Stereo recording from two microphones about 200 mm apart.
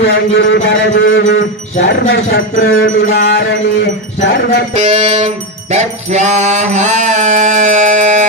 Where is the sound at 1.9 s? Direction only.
50° left (ahead or behind).